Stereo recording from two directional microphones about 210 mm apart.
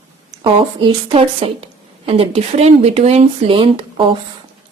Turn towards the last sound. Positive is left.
turn(degrees=-25)  # may be behind; listen again after turning